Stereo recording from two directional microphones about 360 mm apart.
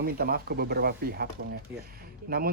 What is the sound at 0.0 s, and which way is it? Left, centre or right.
Speech, right.